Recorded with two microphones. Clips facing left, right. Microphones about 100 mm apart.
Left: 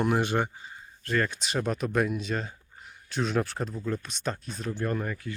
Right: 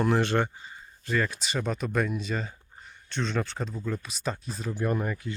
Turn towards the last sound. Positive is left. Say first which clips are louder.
# right 2 dB
turn(degrees=-15)  # may be behind; listen again after turning